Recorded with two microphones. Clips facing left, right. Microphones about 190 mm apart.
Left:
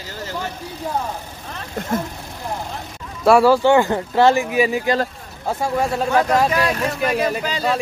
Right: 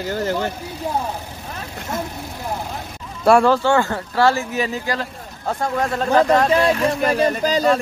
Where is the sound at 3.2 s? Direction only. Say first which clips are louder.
Left 1 dB; 5° left (ahead or behind).